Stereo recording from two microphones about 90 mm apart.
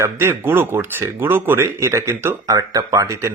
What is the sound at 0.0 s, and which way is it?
Speech, 25° right (ahead or behind).